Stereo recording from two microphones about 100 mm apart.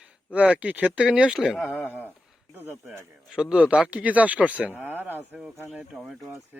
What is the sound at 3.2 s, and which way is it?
A man's voice, 10° right (ahead or behind).